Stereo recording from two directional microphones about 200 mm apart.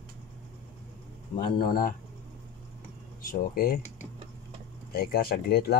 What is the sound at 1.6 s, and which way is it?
Speech, 45° left (ahead or behind).